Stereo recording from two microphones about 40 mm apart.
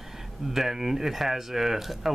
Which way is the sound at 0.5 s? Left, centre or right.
Centre.